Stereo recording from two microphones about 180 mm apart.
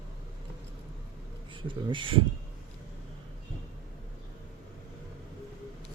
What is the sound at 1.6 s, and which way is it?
Speech, 25° right (ahead or behind).